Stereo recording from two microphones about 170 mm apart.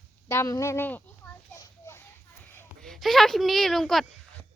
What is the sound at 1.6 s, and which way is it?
Children playing, 15° left (ahead or behind).